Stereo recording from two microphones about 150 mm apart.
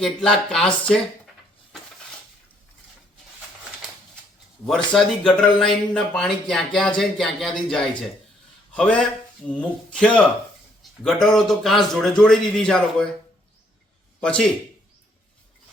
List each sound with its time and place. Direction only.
0.0 s speech: 5° left (ahead or behind)
4.6 s speech: 5° left (ahead or behind)
11.3 s speech: centre (ahead or behind)
14.2 s a man's voice: 5° left (ahead or behind)